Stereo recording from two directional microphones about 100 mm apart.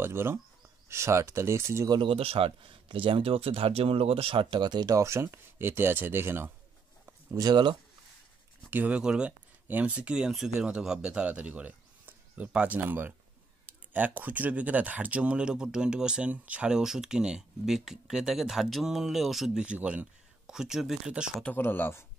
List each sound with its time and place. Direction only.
0.0 s speech: 25° right (ahead or behind)
1.9 s speech: 60° right (ahead or behind); by 6.5 s 25° right (ahead or behind)
7.1 s a sound: 30° right (ahead or behind)
7.4 s speech: 50° right (ahead or behind)
8.6 s speech: 15° right (ahead or behind)
21.5 s speech: 20° left (ahead or behind)